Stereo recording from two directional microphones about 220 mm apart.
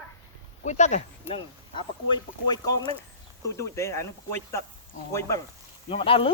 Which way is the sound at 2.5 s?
20° left (ahead or behind).